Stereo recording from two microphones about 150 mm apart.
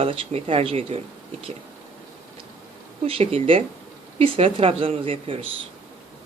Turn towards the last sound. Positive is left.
turn(degrees=-35)  # may be behind; listen again after turning